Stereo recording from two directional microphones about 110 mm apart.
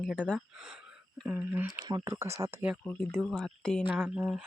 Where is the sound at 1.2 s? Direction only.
15° right (ahead or behind).